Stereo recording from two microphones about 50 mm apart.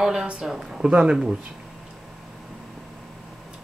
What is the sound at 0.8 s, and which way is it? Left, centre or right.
Speech, right.